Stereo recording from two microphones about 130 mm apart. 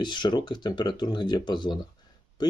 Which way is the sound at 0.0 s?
35° left (ahead or behind).